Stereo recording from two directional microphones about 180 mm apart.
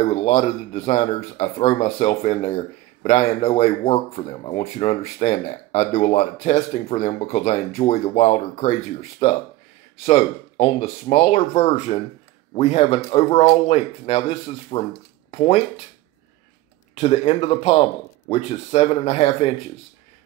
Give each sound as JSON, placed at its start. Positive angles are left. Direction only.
{"t": 0.0, "sound": "speech", "side_deg": 35}
{"t": 10.0, "sound": "speech", "side_deg": 35}
{"t": 16.9, "sound": "speech", "side_deg": 35}